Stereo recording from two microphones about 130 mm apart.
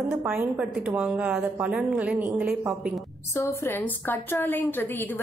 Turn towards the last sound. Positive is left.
turn(degrees=15)  # may be behind; listen again after turning